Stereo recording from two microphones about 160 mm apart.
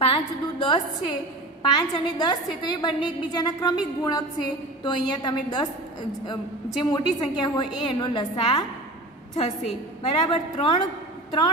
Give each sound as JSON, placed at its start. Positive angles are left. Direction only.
{"t": 0.0, "sound": "a woman's voice", "side_deg": 35}